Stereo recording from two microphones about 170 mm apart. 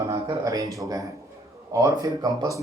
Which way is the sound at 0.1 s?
20° right (ahead or behind).